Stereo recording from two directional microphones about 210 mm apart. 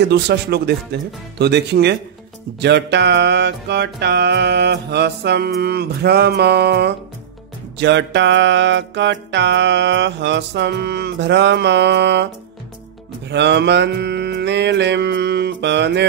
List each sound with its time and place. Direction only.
0.1 s music: 50° right (ahead or behind)